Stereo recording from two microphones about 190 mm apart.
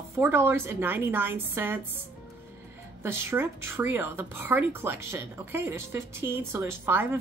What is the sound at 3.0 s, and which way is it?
Speech, 10° right (ahead or behind).